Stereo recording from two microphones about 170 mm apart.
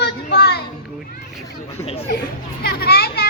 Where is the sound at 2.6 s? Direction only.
65° left (ahead or behind).